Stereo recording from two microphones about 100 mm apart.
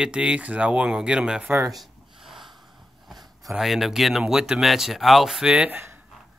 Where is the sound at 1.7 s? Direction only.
Centre (ahead or behind).